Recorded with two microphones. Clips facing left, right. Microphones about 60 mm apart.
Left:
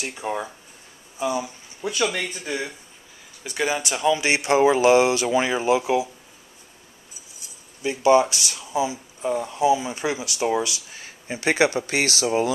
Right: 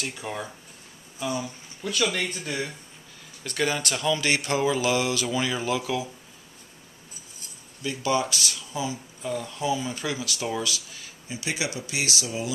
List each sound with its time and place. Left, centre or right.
0.0 s speech: left
2.1 s speech: centre; by 6.0 s left
7.8 s speech: left